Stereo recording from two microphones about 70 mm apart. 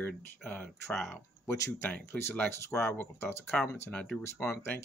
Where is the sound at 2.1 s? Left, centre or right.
Centre.